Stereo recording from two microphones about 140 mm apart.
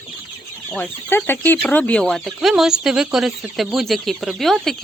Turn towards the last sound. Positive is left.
turn(degrees=0)  # may be behind; listen again after turning